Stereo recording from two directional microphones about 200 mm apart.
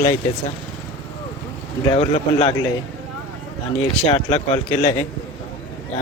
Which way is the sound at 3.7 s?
30° left (ahead or behind).